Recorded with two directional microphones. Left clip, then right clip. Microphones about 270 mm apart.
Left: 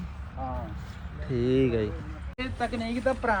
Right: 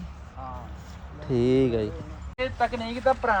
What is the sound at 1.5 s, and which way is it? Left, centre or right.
Speech, right.